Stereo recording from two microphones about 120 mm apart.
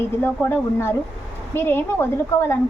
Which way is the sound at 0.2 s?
20° left (ahead or behind).